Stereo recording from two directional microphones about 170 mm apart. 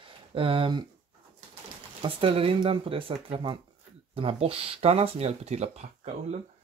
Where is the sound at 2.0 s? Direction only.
35° right (ahead or behind).